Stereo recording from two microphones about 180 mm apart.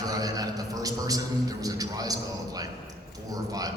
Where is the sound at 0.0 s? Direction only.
20° right (ahead or behind).